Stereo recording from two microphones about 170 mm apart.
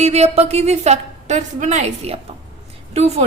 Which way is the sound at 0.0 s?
40° right (ahead or behind).